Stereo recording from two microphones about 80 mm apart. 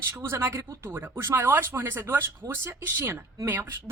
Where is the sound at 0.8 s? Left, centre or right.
Right.